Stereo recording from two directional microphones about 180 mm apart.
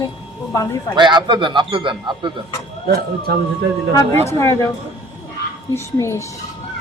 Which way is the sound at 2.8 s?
60° right (ahead or behind).